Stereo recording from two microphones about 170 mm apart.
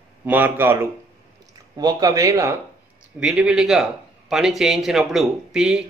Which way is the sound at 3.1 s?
5° right (ahead or behind).